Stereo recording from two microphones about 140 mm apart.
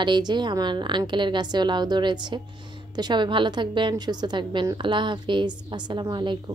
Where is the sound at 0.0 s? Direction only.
30° right (ahead or behind).